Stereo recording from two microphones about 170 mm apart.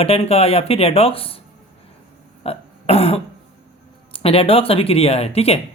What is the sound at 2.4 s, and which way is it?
Throat clearing, 35° left (ahead or behind).